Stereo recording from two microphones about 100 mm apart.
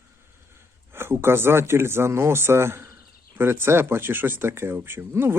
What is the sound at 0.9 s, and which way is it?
Speech, 25° right (ahead or behind).